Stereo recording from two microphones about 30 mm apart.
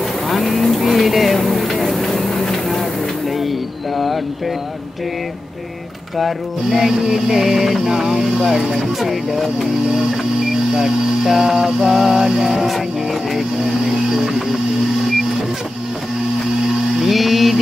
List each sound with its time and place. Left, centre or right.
0.3 s vehicle: centre
3.3 s a sound: centre
6.1 s music: centre
9.0 s music: centre
10.5 s a sound: centre
11.2 s music: centre
13.3 s music: centre
13.8 s music: centre
16.6 s music: centre